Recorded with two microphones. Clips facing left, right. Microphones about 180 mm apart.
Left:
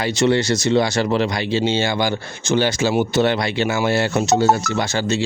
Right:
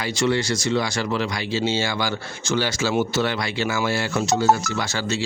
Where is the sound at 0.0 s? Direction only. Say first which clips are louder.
Left 5 dB; 25° left (ahead or behind).